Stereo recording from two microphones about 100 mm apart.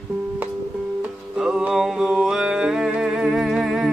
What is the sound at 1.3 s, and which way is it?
Music, 5° right (ahead or behind).